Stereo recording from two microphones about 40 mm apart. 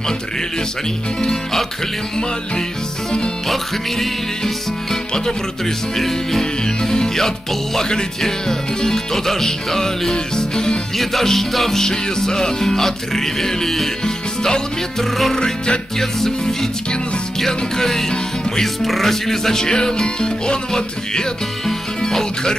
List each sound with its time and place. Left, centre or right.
1.2 s music: centre
3.4 s music: centre
5.9 s music: centre
11.0 s music: centre
15.0 s music: centre
15.3 s music: centre
16.0 s music: centre
22.0 s speech: centre